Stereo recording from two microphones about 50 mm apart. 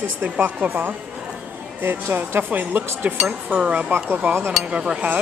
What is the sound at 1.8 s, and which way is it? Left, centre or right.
Speech, right.